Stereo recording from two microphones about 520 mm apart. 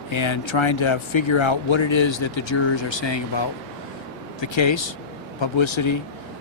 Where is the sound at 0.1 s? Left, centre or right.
Left.